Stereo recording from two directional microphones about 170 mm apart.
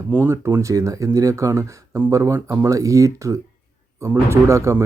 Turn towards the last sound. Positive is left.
turn(degrees=-15)  # may be behind; listen again after turning